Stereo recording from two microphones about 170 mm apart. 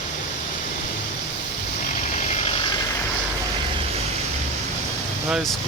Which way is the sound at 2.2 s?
40° left (ahead or behind).